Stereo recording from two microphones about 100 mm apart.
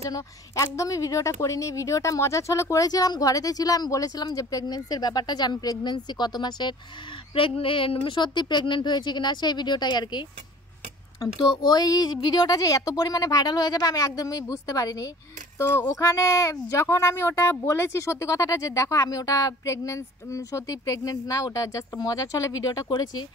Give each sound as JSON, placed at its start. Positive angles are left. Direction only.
{"t": 0.1, "sound": "a woman's voice", "side_deg": 35}
{"t": 7.3, "sound": "speech", "side_deg": 65}
{"t": 11.3, "sound": "a woman's voice", "side_deg": 45}